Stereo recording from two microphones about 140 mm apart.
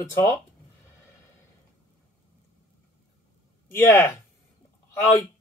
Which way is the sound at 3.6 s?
15° left (ahead or behind).